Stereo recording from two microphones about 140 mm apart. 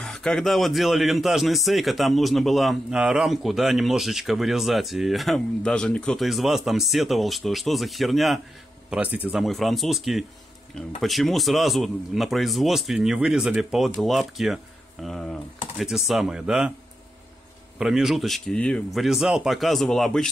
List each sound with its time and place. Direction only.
0.0 s a man's voice: 5° left (ahead or behind)
8.9 s speech: 10° right (ahead or behind)
9.3 s a man's voice: centre (ahead or behind)
17.7 s a man's voice: 5° right (ahead or behind)